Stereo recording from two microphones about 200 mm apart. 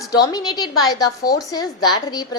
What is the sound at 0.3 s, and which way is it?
A woman's voice, 20° left (ahead or behind).